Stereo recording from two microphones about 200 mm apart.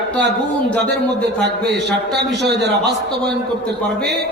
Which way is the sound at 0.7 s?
5° left (ahead or behind).